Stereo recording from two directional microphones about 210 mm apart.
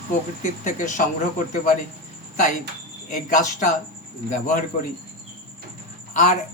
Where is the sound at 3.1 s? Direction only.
40° left (ahead or behind).